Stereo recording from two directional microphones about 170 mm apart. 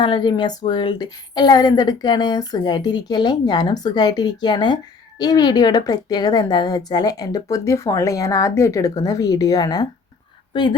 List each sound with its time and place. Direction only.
0.0 s a woman's voice: 25° left (ahead or behind)